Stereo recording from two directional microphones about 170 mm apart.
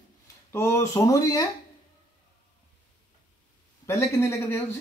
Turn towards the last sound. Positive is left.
turn(degrees=15)  # may be behind; listen again after turning